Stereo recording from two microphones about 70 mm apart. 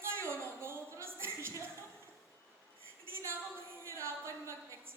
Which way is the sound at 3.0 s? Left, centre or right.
Right.